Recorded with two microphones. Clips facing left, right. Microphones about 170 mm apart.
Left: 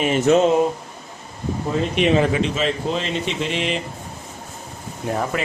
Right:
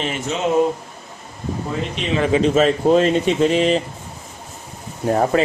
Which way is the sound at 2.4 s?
45° right (ahead or behind).